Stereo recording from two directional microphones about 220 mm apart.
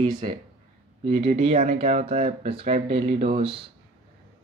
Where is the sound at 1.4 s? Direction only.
30° right (ahead or behind).